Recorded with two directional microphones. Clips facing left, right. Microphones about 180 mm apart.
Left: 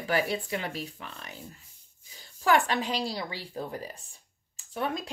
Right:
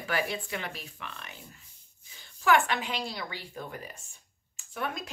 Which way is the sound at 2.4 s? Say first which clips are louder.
Left 1 dB; 35° left (ahead or behind).